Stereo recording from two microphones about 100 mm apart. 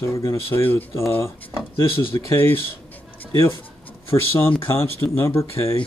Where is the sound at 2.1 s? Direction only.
25° left (ahead or behind).